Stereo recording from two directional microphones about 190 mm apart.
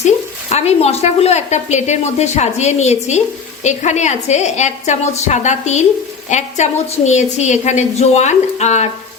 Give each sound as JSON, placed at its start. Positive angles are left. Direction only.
{"t": 0.5, "sound": "a woman's voice", "side_deg": 35}